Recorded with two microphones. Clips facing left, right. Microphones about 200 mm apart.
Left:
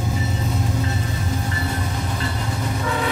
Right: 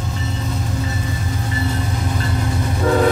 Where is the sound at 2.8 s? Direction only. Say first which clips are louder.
Right 11 dB; 45° right (ahead or behind).